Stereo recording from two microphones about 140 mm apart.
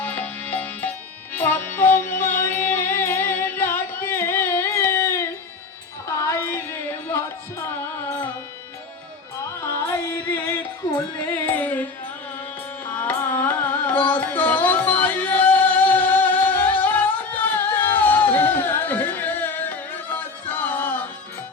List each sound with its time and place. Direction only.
0.0 s music: 15° left (ahead or behind)
9.6 s music: 15° left (ahead or behind)
10.8 s music: 35° left (ahead or behind)
11.4 s music: 10° left (ahead or behind)
12.8 s carnatic music: 15° left (ahead or behind)